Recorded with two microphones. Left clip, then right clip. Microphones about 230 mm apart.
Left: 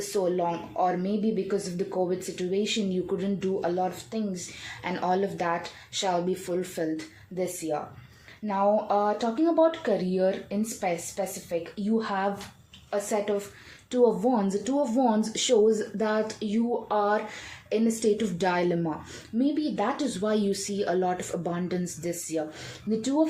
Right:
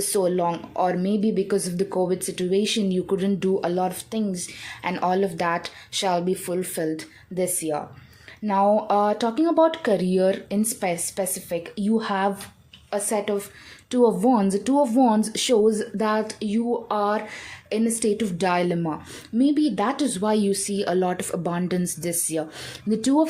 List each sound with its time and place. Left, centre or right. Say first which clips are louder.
0.1 s speech: right 4 dB; right